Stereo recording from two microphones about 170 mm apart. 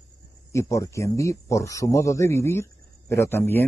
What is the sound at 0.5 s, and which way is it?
Speech, 20° left (ahead or behind).